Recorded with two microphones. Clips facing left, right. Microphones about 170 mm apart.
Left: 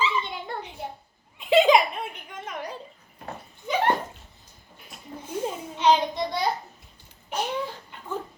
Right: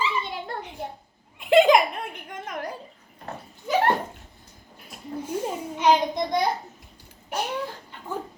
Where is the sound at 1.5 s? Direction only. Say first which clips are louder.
Right 2 dB; 55° right (ahead or behind).